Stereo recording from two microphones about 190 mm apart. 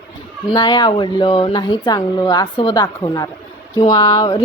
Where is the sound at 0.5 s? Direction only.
20° left (ahead or behind).